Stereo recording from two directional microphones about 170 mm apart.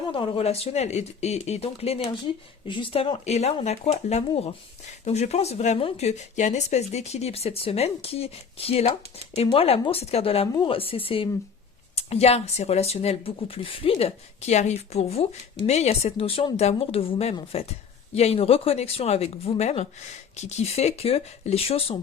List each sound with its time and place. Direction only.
0.1 s speech: 30° left (ahead or behind)